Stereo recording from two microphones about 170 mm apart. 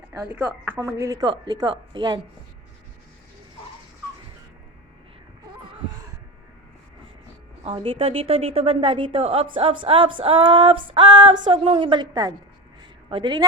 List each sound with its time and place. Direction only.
0.1 s a woman's voice: 15° right (ahead or behind)
7.6 s a sound: 35° right (ahead or behind)
13.1 s speech: 30° right (ahead or behind)